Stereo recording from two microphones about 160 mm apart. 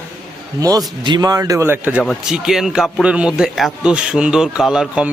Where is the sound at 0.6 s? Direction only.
20° right (ahead or behind).